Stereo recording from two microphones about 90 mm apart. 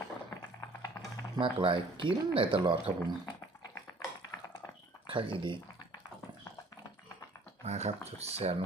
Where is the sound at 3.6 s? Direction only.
40° left (ahead or behind).